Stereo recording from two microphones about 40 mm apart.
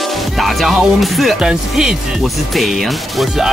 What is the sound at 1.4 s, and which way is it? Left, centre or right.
Speech, centre.